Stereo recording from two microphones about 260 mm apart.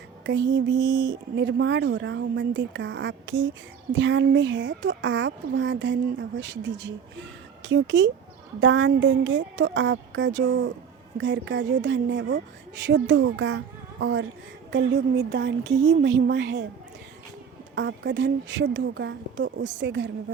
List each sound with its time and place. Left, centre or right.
0.3 s a woman's voice: right
17.7 s a woman's voice: right